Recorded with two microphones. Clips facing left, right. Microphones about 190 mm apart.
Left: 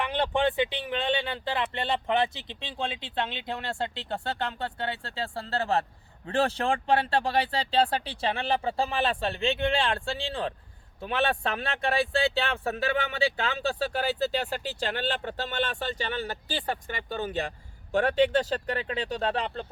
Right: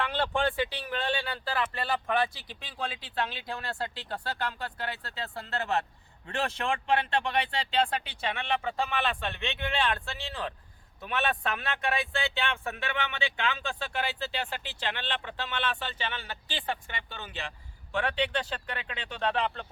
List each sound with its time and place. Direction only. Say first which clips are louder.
0.0 s speech: left 3 dB; 20° left (ahead or behind); by 19.6 s 35° left (ahead or behind)